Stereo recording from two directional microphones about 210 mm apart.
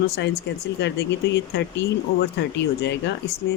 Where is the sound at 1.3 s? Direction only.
55° left (ahead or behind).